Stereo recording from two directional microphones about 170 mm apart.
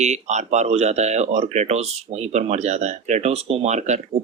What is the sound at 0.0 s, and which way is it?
Speech, 45° right (ahead or behind).